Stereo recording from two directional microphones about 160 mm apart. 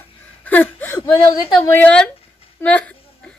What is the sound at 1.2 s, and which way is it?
Speech, 30° left (ahead or behind).